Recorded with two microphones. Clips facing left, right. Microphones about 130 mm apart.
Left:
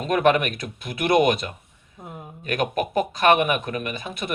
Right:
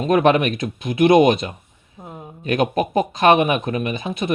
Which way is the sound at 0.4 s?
50° left (ahead or behind).